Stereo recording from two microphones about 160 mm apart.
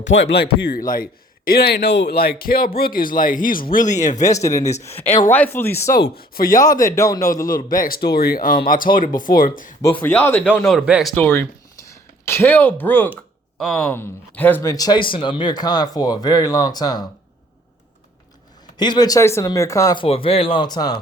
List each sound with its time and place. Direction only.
0.0 s speech: 90° left; by 1.0 s 60° left (ahead or behind)
1.5 s speech: 85° left; by 4.2 s 50° left (ahead or behind)
4.4 s speech: 20° left (ahead or behind)
6.1 s speech: 65° left (ahead or behind)
6.6 s speech: 20° left (ahead or behind)
7.4 s speech: 60° left (ahead or behind)
10.0 s a man's voice: 10° left (ahead or behind)
11.1 s speech: 10° left (ahead or behind)
18.8 s speech: 25° left (ahead or behind)
20.1 s speech: 35° left (ahead or behind)